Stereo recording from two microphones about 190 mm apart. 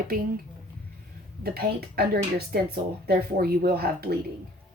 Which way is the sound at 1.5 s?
55° right (ahead or behind).